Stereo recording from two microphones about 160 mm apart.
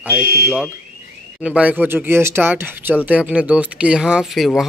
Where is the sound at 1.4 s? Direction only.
10° right (ahead or behind).